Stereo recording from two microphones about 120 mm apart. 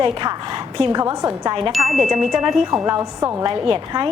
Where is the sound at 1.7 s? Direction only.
Centre (ahead or behind).